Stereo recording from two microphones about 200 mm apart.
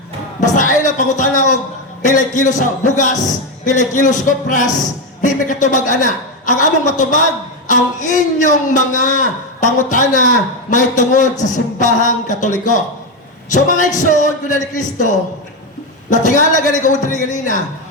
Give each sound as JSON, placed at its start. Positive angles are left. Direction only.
{"t": 0.3, "sound": "a man's voice", "side_deg": 40}